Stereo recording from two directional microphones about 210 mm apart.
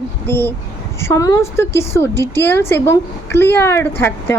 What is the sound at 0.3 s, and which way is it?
A woman's voice, 10° left (ahead or behind).